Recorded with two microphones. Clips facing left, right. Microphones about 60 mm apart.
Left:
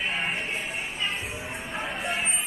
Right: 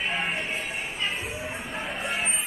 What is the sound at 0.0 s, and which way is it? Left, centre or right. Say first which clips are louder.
Music: right 1 dB; centre.